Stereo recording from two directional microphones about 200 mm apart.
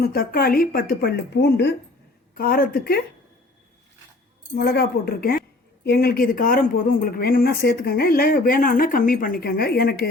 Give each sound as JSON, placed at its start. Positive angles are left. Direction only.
{"t": 0.0, "sound": "speech", "side_deg": 50}
{"t": 4.5, "sound": "speech", "side_deg": 50}